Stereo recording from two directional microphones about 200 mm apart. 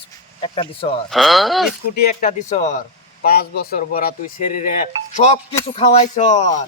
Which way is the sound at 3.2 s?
50° left (ahead or behind).